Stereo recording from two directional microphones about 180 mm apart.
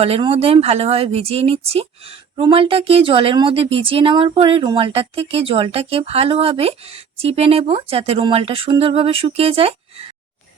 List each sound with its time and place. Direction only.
0.0 s speech: 30° right (ahead or behind)